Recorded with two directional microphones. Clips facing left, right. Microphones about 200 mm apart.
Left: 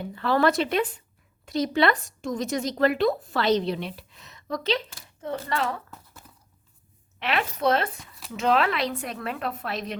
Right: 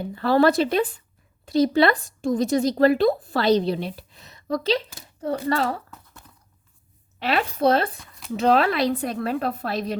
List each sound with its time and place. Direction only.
0.0 s speech: 35° right (ahead or behind)
5.9 s a sound: 5° left (ahead or behind)
7.2 s speech: 35° right (ahead or behind)